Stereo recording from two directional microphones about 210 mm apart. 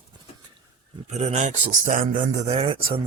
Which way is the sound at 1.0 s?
30° right (ahead or behind).